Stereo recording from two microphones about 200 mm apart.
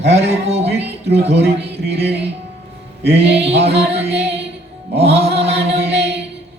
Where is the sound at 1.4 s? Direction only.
55° right (ahead or behind).